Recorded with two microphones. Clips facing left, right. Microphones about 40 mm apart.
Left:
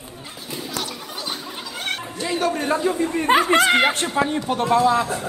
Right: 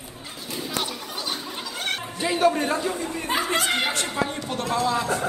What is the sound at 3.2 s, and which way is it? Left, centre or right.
Speech, left.